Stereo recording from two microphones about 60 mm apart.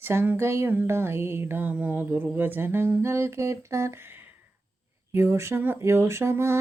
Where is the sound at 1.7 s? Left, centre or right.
Right.